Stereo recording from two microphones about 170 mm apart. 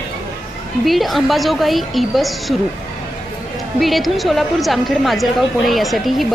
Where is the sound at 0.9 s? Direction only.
Centre (ahead or behind).